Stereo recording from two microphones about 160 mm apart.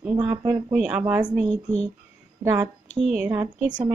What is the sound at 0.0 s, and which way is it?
Speech, 10° right (ahead or behind).